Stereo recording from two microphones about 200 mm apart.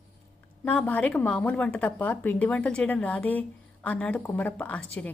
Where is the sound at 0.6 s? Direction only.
5° left (ahead or behind).